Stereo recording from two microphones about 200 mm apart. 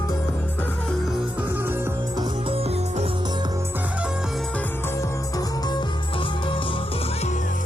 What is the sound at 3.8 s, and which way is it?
Music, 5° right (ahead or behind).